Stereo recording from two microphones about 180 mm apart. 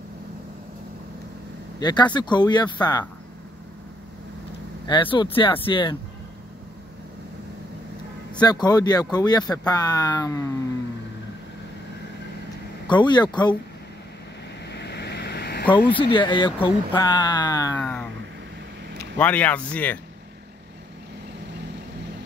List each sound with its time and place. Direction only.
1.8 s speech: 20° left (ahead or behind)
4.8 s speech: 25° left (ahead or behind)
8.4 s speech: 20° left (ahead or behind)
12.8 s speech: 25° left (ahead or behind)
14.7 s boat: 70° left (ahead or behind)
15.7 s speech: 30° left (ahead or behind)
17.7 s speech: 10° left (ahead or behind)
19.1 s speech: 10° left (ahead or behind)